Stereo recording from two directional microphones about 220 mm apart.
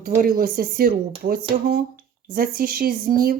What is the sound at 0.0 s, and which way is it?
Speech, 40° right (ahead or behind).